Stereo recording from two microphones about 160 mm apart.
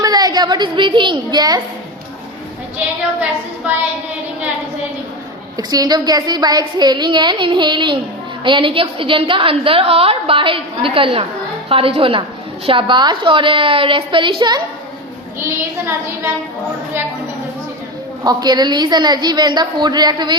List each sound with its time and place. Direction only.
0.0 s a child's voice: 25° right (ahead or behind)
5.5 s a woman's voice: 25° right (ahead or behind)
15.4 s child singing: 15° right (ahead or behind)
18.2 s a woman's voice: 25° right (ahead or behind)